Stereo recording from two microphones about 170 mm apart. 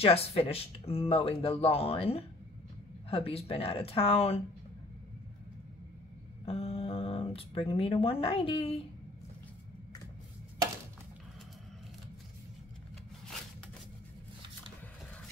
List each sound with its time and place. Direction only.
0.0 s speech: 35° left (ahead or behind)
6.4 s speech: 35° left (ahead or behind)